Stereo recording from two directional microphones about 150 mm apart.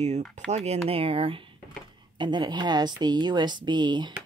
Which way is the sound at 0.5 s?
45° right (ahead or behind).